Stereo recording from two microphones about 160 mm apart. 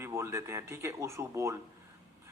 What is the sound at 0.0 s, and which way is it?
A man's voice, 15° right (ahead or behind).